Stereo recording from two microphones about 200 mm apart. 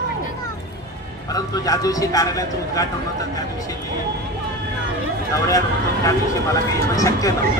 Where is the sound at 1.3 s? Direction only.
20° left (ahead or behind).